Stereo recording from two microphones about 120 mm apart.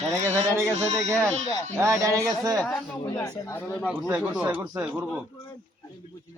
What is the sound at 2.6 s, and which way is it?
Speech, 10° left (ahead or behind).